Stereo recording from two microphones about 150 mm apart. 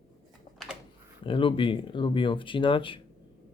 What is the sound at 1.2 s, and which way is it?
Speech, 35° left (ahead or behind).